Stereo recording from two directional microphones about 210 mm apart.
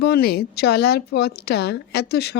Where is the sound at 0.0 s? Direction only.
50° left (ahead or behind).